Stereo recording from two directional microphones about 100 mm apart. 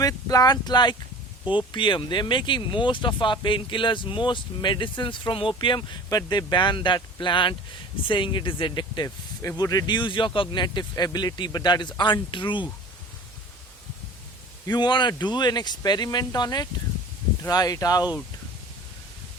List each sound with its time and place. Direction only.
0.0 s speech: 35° left (ahead or behind)
9.0 s speech: 30° left (ahead or behind); by 12.7 s 50° left (ahead or behind)
14.7 s speech: 45° left (ahead or behind)